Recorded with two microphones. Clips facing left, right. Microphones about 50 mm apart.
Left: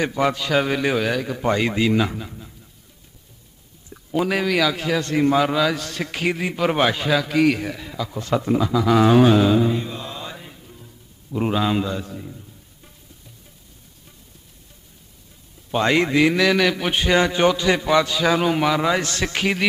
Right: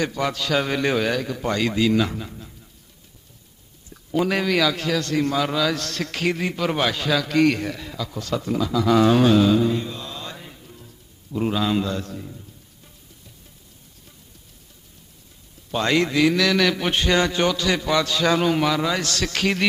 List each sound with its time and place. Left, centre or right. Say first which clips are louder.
0.0 s a man's voice: left 3 dB; centre
2.1 s speech: even; centre
4.2 s a man's voice: left 1 dB; centre
6.7 s a man's voice: left 4 dB; left
8.2 s speech: left 4 dB; left; by 12.9 s centre
15.7 s a man's voice: left 2 dB; left